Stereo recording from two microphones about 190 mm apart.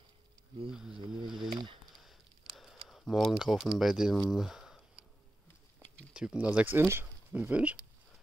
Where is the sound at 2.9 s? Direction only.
Centre (ahead or behind).